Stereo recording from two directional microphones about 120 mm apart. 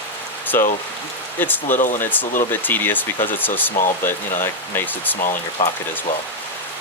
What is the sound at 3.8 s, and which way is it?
Speech, 90° left.